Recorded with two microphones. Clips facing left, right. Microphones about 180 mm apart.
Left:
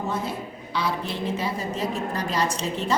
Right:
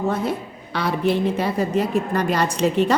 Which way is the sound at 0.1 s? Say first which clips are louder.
Right 5 dB; 60° right (ahead or behind).